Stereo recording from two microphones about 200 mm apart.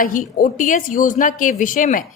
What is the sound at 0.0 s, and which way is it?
A woman's voice, 40° left (ahead or behind).